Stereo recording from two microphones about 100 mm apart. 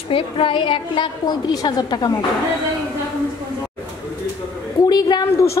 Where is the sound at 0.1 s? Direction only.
60° left (ahead or behind).